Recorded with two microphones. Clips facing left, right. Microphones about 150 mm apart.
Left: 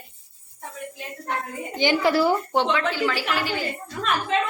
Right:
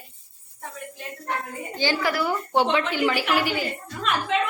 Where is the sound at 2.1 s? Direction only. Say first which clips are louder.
Left 5 dB; 30° left (ahead or behind).